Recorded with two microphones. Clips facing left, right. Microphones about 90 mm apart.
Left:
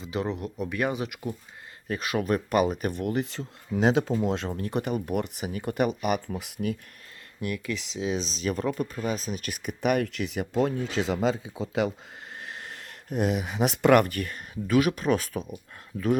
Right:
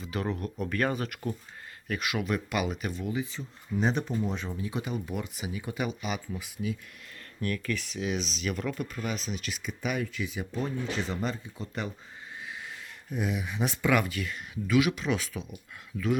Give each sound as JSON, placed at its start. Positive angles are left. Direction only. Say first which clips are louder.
{"t": 0.0, "sound": "a sound", "louder": "left 3 dB", "side_deg": 25}
{"t": 0.3, "sound": "speech", "louder": "left 1 dB", "side_deg": 15}
{"t": 1.9, "sound": "speech", "louder": "left 4 dB", "side_deg": 35}
{"t": 2.9, "sound": "speech", "louder": "left 4 dB", "side_deg": 60}
{"t": 4.4, "sound": "speech", "louder": "left 5 dB", "side_deg": 60}
{"t": 7.4, "sound": "speech", "louder": "left 1 dB", "side_deg": 15}
{"t": 12.4, "sound": "speech", "louder": "left 1 dB", "side_deg": 60}